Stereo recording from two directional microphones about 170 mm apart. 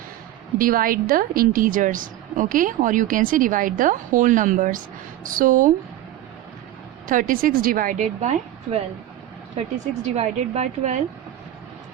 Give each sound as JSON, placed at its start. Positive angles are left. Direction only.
{"t": 0.6, "sound": "a woman's voice", "side_deg": -55}
{"t": 7.1, "sound": "a woman's voice", "side_deg": -55}
{"t": 10.2, "sound": "a woman's voice", "side_deg": -40}